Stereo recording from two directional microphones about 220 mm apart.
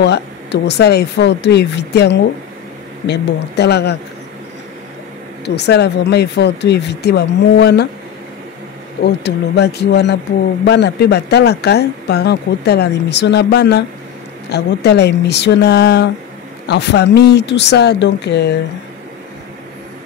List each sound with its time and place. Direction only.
0.0 s speech: 50° left (ahead or behind)
5.4 s speech: 50° left (ahead or behind)
9.0 s speech: 50° left (ahead or behind)